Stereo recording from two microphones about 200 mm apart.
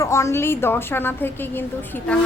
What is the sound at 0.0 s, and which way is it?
A woman's voice, 15° left (ahead or behind).